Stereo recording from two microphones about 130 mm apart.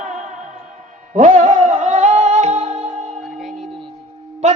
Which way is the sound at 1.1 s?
75° right (ahead or behind).